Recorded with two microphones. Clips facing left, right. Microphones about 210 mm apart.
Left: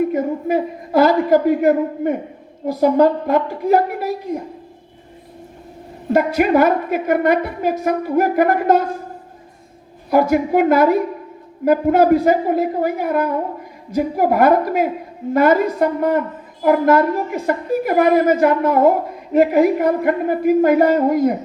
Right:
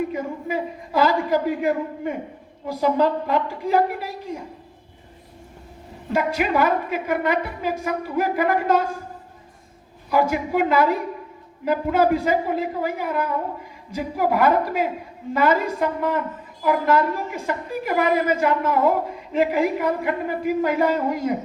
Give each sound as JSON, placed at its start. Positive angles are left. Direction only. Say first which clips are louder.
{"t": 0.0, "sound": "a sound", "louder": "left 8 dB", "side_deg": 45}
{"t": 2.8, "sound": "a woman's voice", "louder": "left 6 dB", "side_deg": 45}
{"t": 6.1, "sound": "a woman's voice", "louder": "left 7 dB", "side_deg": 45}
{"t": 10.1, "sound": "a woman's voice", "louder": "left 6 dB", "side_deg": 45}